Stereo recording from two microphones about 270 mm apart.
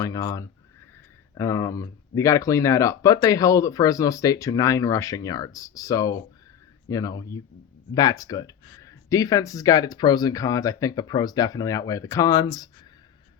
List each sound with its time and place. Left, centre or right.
0.0 s speech: centre